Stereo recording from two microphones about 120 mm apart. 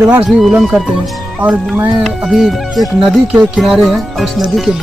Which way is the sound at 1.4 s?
15° right (ahead or behind).